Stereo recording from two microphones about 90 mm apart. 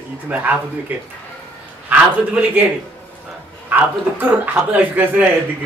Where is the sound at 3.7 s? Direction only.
20° right (ahead or behind).